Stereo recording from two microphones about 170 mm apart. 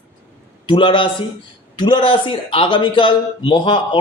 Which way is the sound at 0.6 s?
30° left (ahead or behind).